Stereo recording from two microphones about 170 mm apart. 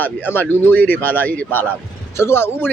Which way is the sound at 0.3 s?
10° left (ahead or behind).